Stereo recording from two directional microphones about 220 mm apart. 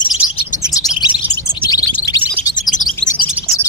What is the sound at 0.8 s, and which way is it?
Chirp, 20° left (ahead or behind).